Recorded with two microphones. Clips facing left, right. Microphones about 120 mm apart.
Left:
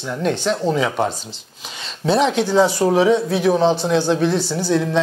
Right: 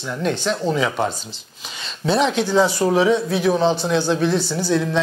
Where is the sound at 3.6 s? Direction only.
25° left (ahead or behind).